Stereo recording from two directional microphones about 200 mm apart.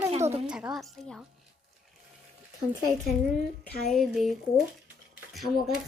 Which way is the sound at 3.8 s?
Centre (ahead or behind).